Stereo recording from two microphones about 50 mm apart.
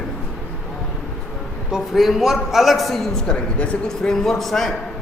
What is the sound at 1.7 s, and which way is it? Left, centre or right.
A man's voice, centre.